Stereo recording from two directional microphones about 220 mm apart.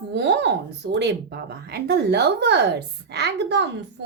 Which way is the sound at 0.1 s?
50° right (ahead or behind).